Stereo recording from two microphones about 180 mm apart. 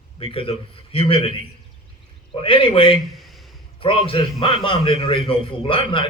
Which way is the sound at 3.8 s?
30° left (ahead or behind).